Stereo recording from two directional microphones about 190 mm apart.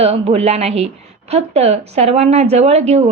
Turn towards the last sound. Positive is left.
turn(degrees=-35)  # may be behind; listen again after turning